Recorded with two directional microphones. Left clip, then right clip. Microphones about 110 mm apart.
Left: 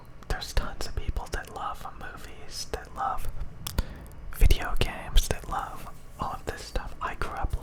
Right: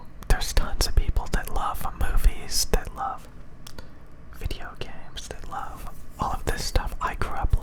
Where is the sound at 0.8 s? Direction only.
30° right (ahead or behind).